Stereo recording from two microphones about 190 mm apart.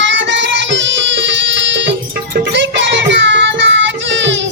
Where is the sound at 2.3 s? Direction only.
70° right (ahead or behind).